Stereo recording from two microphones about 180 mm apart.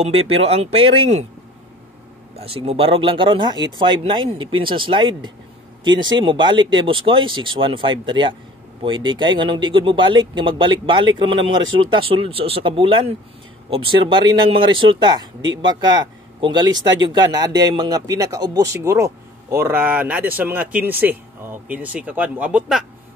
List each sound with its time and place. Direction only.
0.0 s speech: 35° right (ahead or behind)
2.3 s speech: 35° right (ahead or behind); by 22.8 s 5° right (ahead or behind)